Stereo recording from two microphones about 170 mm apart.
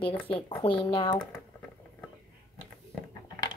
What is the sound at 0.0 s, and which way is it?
A woman's voice, 30° left (ahead or behind).